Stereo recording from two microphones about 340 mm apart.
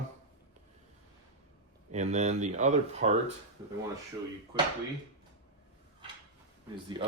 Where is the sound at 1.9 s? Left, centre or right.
Right.